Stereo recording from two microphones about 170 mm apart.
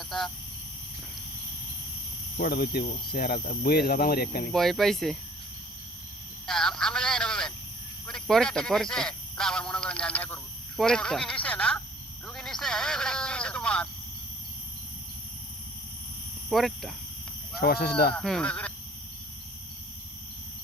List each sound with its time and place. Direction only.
2.4 s speech: 65° left (ahead or behind)
4.5 s speech: centre (ahead or behind)
6.4 s a sound: 5° left (ahead or behind)
8.0 s speech: 5° left (ahead or behind)
12.2 s a sound: 5° left (ahead or behind)
16.5 s speech: centre (ahead or behind)
17.6 s speech: 65° left (ahead or behind)
18.1 s speech: 5° left (ahead or behind)